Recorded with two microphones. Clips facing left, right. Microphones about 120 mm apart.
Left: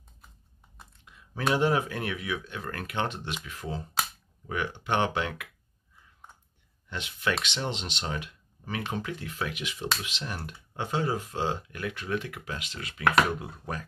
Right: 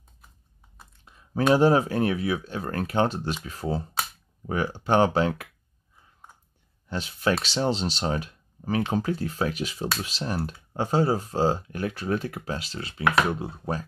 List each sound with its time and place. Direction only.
1.0 s a sound: 35° right (ahead or behind)
1.5 s speech: 35° right (ahead or behind)
6.9 s speech: 35° right (ahead or behind)